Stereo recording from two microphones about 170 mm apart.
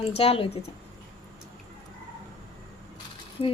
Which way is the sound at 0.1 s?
35° left (ahead or behind).